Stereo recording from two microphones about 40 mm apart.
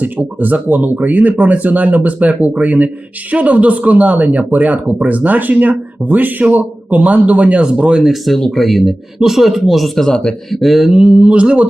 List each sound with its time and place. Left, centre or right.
0.0 s speech: right
7.6 s speech: right
8.0 s a man's voice: centre
8.4 s speech: centre
8.6 s a man's voice: centre
10.5 s a man's voice: centre
10.9 s speech: right